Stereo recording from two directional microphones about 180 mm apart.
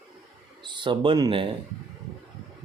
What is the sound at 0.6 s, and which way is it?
Speech, 25° right (ahead or behind).